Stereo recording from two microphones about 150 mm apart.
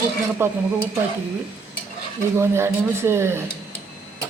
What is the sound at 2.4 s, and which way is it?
Speech, 15° right (ahead or behind).